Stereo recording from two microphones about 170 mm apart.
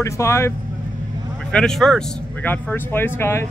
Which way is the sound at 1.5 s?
5° left (ahead or behind).